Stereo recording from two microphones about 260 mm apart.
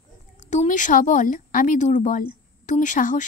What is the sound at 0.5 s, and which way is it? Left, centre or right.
Speech, left.